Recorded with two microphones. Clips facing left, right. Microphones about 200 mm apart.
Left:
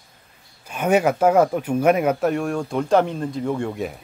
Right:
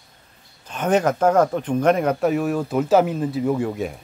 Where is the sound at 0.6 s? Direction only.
10° left (ahead or behind).